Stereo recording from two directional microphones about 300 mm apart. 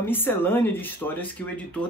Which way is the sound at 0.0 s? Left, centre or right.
Centre.